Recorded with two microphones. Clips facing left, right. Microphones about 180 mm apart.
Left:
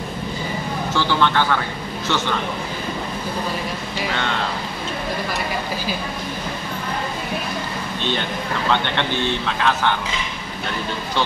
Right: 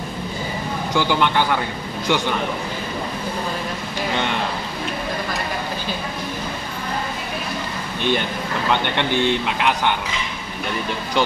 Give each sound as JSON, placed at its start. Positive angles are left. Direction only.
{"t": 0.9, "sound": "a man's voice", "side_deg": -15}
{"t": 8.9, "sound": "a man's voice", "side_deg": -15}